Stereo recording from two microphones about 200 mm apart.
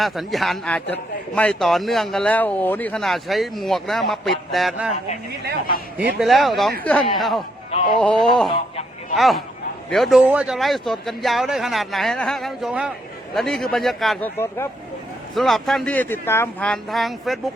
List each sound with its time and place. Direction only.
0.0 s speech: centre (ahead or behind)
6.1 s speech: centre (ahead or behind)
14.3 s speech: 10° left (ahead or behind)
15.4 s speech: centre (ahead or behind)